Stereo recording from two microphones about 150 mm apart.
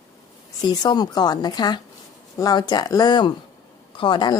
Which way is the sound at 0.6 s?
25° left (ahead or behind).